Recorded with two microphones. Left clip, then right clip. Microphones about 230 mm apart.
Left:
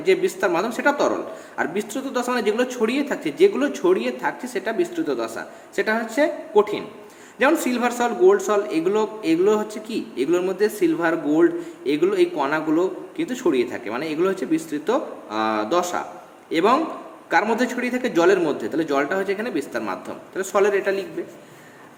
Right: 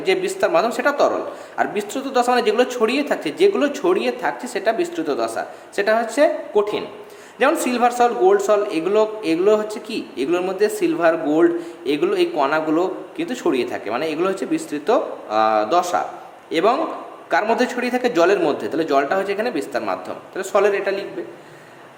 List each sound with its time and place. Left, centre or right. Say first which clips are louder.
0.0 s a man's voice: right 1 dB; centre